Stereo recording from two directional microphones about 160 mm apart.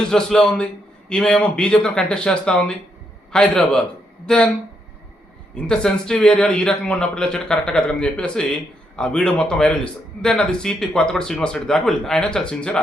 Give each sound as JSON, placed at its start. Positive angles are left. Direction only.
{"t": 0.0, "sound": "a man's voice", "side_deg": 5}
{"t": 5.5, "sound": "a man's voice", "side_deg": 5}